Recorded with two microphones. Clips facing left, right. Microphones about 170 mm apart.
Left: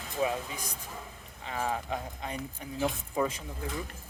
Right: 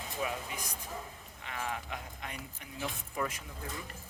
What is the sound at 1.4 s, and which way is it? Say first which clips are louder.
Speech: left 6 dB; 35° left (ahead or behind).